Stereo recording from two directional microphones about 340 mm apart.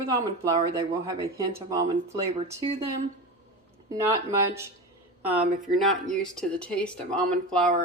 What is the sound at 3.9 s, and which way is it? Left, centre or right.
Speech, centre.